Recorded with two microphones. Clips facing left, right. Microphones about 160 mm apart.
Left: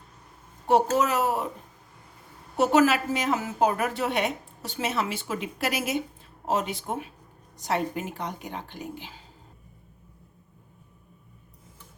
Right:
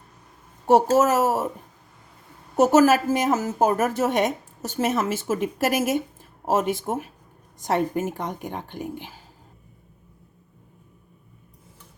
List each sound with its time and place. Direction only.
0.7 s a woman's voice: 45° right (ahead or behind)
2.6 s a woman's voice: 45° right (ahead or behind)